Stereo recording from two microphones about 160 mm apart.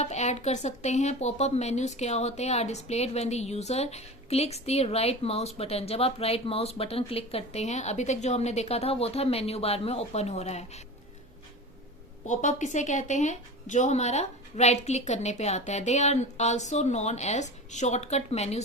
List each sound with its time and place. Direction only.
0.0 s speech: 45° left (ahead or behind)
12.3 s speech: 50° left (ahead or behind)